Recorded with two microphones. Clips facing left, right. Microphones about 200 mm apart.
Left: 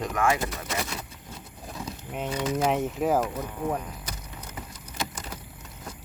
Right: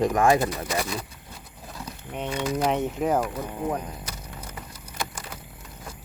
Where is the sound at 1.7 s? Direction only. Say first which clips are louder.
Even; centre (ahead or behind).